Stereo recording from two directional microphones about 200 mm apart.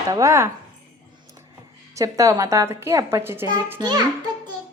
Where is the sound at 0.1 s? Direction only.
15° right (ahead or behind).